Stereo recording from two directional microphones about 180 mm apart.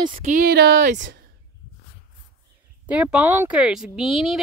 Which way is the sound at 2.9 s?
5° right (ahead or behind).